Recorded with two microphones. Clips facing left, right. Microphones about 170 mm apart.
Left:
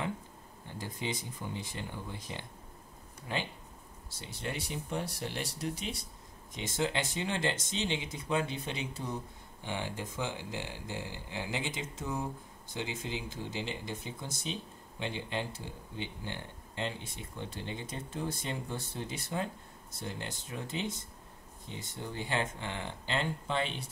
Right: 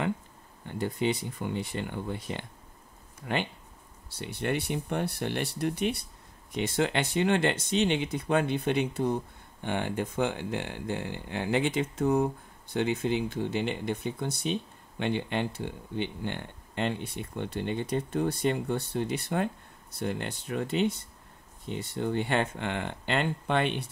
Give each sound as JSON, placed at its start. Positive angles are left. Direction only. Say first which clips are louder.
{"t": 0.7, "sound": "speech", "louder": "right 10 dB", "side_deg": -65}